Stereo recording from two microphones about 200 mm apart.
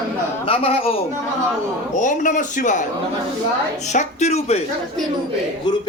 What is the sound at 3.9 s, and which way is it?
Speech, 35° left (ahead or behind).